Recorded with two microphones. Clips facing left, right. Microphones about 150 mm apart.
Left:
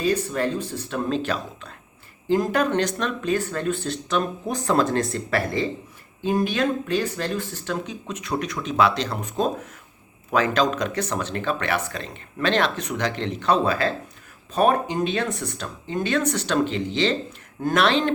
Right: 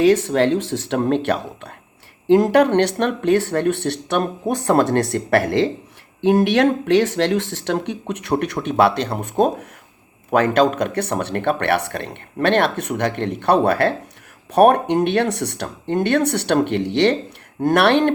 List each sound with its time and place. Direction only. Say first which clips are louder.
0.0 s speech: right 8 dB; 90° right; by 4.2 s 70° right (ahead or behind)
4.2 s speech: right 5 dB; 55° right (ahead or behind); by 5.7 s 80° right
6.2 s speech: right 7 dB; 70° right (ahead or behind)